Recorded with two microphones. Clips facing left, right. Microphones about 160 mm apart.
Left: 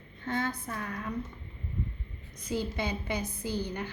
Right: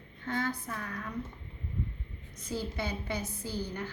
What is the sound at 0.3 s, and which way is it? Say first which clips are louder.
Speech: left 1 dB; 25° left (ahead or behind).